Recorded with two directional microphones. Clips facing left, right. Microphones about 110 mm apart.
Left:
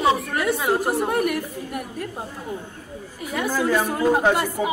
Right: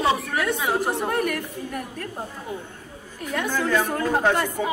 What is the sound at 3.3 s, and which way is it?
Speech, 10° left (ahead or behind).